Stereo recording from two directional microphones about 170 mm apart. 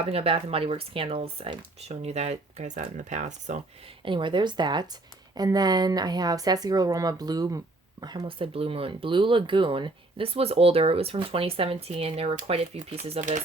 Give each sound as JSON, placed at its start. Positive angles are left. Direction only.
{"t": 0.0, "sound": "speech", "side_deg": -35}
{"t": 4.0, "sound": "speech", "side_deg": -30}